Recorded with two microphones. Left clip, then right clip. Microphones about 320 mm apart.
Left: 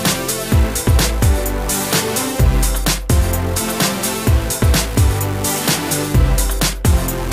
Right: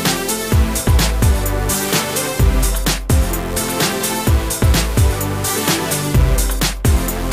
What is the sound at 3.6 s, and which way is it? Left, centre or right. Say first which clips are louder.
Music: right 1 dB; centre.